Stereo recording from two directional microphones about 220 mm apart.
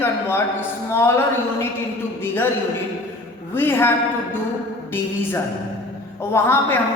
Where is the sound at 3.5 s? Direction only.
10° left (ahead or behind).